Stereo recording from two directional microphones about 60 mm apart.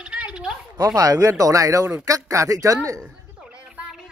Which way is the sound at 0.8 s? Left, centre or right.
Right.